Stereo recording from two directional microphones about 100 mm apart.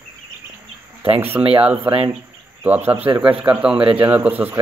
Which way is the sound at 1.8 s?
60° right (ahead or behind).